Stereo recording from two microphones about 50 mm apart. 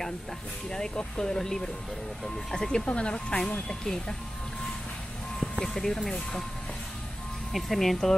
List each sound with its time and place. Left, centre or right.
0.7 s speech: centre
5.7 s speech: centre
7.5 s speech: centre